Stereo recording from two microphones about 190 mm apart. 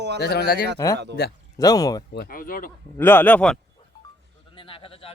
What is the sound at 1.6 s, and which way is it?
Speech, 20° left (ahead or behind).